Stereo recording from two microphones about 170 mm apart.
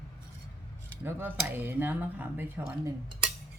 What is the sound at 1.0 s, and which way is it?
Speech, 10° right (ahead or behind).